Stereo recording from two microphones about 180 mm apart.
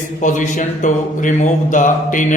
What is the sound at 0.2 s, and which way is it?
Mantra, 45° left (ahead or behind).